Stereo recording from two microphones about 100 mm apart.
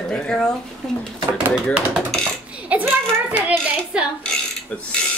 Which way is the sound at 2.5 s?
15° right (ahead or behind).